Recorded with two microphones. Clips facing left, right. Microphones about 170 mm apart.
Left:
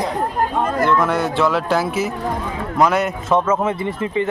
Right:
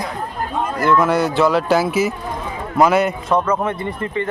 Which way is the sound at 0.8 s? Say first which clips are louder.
Right 4 dB; 5° right (ahead or behind).